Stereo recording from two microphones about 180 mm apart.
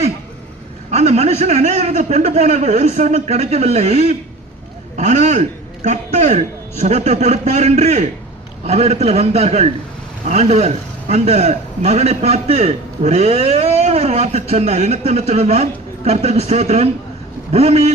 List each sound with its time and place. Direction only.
0.9 s a man's voice: 35° right (ahead or behind)